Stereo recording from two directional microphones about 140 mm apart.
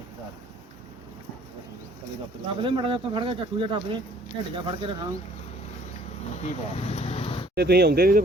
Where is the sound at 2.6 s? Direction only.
35° right (ahead or behind).